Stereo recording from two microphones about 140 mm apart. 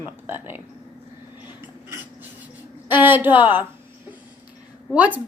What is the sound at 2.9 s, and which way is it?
Speech, 15° right (ahead or behind).